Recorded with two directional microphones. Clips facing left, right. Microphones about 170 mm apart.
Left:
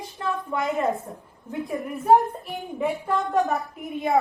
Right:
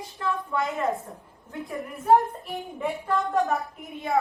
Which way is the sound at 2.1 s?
Centre (ahead or behind).